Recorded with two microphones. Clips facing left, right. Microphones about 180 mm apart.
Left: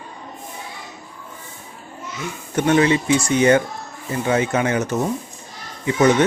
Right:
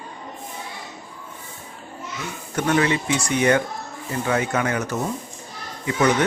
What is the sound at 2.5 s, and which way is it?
A man's voice, 25° left (ahead or behind).